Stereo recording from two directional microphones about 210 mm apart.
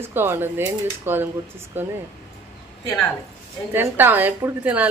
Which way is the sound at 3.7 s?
10° right (ahead or behind).